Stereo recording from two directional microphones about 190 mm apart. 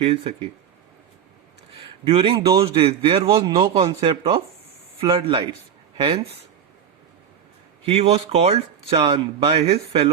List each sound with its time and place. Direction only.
0.0 s a man's voice: 30° right (ahead or behind)
2.0 s a man's voice: 30° right (ahead or behind)
7.9 s a man's voice: 35° right (ahead or behind)